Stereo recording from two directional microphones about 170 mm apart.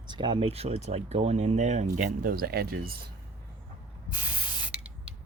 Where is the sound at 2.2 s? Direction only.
60° right (ahead or behind).